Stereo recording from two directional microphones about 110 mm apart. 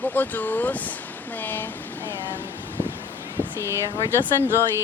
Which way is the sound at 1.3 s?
15° left (ahead or behind).